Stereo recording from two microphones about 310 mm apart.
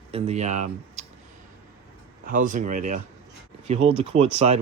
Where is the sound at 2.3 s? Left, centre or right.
Right.